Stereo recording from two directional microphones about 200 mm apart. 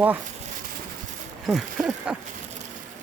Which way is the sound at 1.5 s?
Centre (ahead or behind).